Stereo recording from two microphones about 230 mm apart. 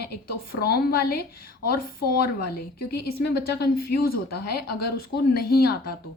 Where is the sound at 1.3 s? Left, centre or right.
Left.